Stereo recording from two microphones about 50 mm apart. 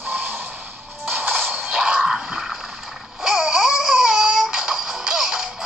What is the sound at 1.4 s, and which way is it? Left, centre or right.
Music, centre.